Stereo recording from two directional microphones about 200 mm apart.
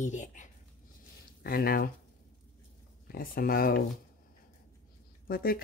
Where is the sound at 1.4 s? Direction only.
50° left (ahead or behind).